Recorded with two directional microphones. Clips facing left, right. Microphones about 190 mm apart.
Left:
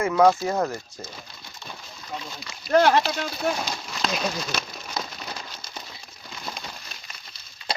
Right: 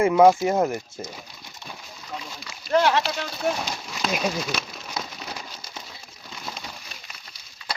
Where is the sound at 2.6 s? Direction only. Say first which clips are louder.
Left 2 dB; 50° left (ahead or behind).